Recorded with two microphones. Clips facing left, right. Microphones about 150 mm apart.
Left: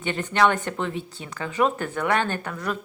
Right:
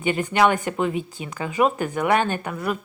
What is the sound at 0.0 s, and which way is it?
A woman's voice, 10° right (ahead or behind).